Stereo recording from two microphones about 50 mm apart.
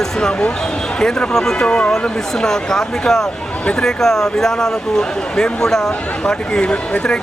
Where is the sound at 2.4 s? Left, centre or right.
Centre.